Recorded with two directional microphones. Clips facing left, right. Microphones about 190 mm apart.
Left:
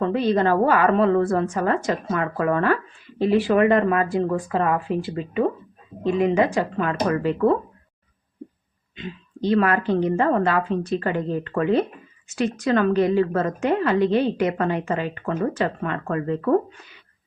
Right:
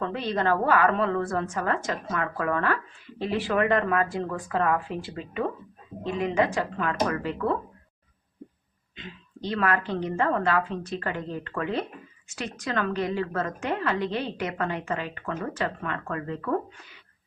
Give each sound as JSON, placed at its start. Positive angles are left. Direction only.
{"t": 0.0, "sound": "a woman's voice", "side_deg": 10}
{"t": 9.5, "sound": "a woman's voice", "side_deg": 20}